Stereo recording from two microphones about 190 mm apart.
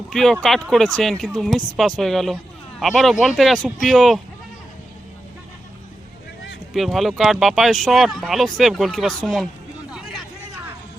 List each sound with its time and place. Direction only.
0.1 s speech: centre (ahead or behind)
6.7 s speech: centre (ahead or behind)
9.9 s vehicle: centre (ahead or behind)